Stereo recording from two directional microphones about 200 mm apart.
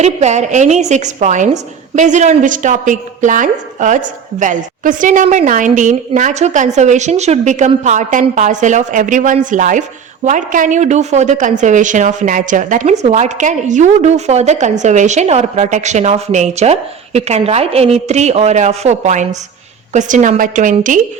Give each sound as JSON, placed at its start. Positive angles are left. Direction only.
{"t": 0.0, "sound": "a woman's voice", "side_deg": -35}